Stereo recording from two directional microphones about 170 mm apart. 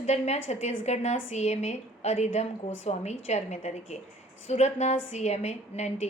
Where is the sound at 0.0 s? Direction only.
40° left (ahead or behind).